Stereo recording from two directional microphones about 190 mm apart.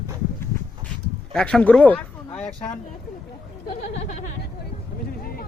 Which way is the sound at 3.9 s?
35° left (ahead or behind).